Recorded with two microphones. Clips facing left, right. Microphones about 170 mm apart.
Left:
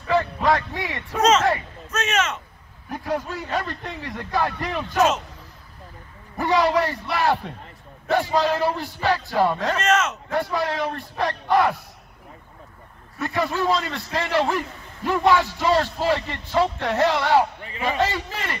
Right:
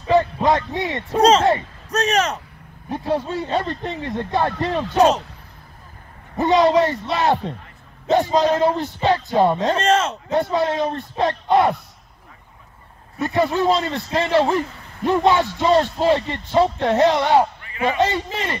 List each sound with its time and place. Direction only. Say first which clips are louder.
0.0 s a man's voice: right 4 dB; 20° right (ahead or behind); by 2.4 s 35° right (ahead or behind)
2.9 s speech: right 4 dB; 25° right (ahead or behind)
6.3 s speech: right 5 dB; 20° right (ahead or behind)
13.2 s speech: right 5 dB; 20° right (ahead or behind)